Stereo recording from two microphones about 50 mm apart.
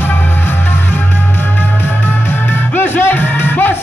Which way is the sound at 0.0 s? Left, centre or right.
Left.